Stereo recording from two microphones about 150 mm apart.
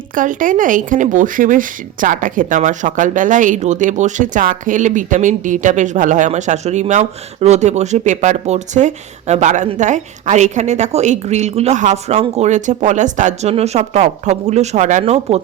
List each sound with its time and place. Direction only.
0.1 s speech: 65° right (ahead or behind); by 15.4 s 45° right (ahead or behind)